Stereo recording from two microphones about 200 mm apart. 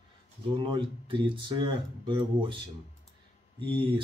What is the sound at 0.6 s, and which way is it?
Speech, 25° right (ahead or behind).